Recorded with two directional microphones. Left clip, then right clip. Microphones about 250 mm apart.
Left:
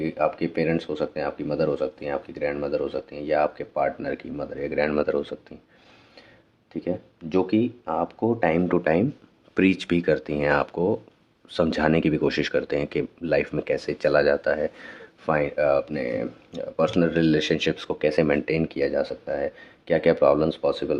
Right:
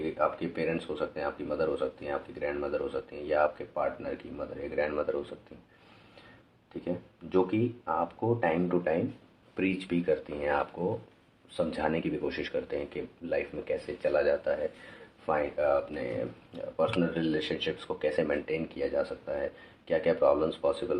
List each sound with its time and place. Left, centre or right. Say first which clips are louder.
0.2 s speech: left 6 dB; left
6.8 s speech: left 6 dB; left